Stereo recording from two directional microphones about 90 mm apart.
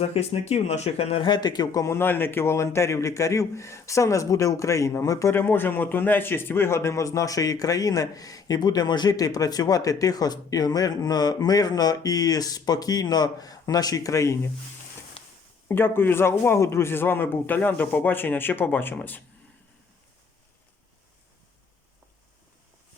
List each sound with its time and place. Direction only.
0.1 s speech: 90° left
1.3 s a man's voice: 50° left (ahead or behind)
1.8 s a man's voice: 25° left (ahead or behind)
5.3 s a man's voice: 25° left (ahead or behind)
15.2 s a sound: 90° left
15.7 s speech: 25° left (ahead or behind)